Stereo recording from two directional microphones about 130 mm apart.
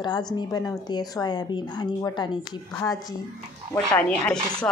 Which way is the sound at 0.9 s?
30° left (ahead or behind).